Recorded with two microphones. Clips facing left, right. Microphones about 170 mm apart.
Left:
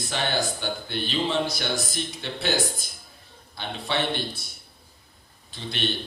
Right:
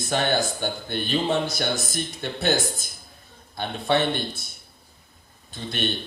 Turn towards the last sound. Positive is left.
turn(degrees=-50)  # may be behind; listen again after turning